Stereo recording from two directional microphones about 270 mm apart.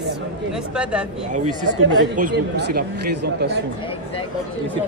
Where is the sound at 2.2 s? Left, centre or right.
Right.